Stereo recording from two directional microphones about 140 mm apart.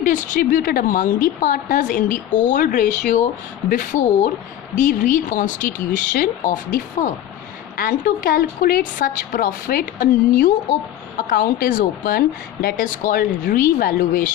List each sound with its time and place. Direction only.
0.0 s speech: 70° left (ahead or behind)
3.7 s speech: 75° left (ahead or behind)
7.8 s a woman's voice: 90° left; by 10.5 s 75° left (ahead or behind)
11.3 s a woman's voice: 90° left